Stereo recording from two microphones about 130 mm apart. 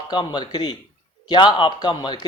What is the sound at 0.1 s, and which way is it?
Speech, 35° left (ahead or behind).